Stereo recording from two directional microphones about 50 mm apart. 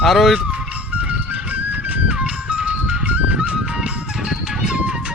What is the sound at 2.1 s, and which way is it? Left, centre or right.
Music, centre.